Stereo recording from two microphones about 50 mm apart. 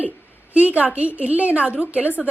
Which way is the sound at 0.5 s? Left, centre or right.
Right.